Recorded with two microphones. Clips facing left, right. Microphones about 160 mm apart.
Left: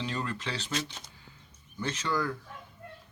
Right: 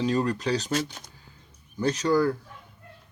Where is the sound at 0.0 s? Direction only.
40° right (ahead or behind).